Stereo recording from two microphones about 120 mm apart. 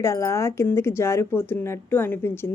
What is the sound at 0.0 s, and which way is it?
A woman's voice, 25° left (ahead or behind).